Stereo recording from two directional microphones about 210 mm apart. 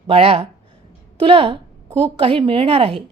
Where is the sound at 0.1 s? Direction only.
25° right (ahead or behind).